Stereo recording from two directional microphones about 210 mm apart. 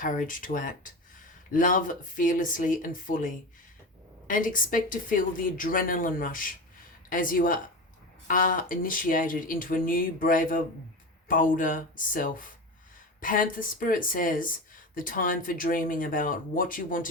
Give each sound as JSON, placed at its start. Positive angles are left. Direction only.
{"t": 0.0, "sound": "speech", "side_deg": 40}